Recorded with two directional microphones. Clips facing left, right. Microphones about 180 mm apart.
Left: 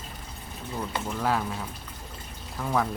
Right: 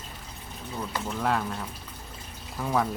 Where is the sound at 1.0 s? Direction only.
Centre (ahead or behind).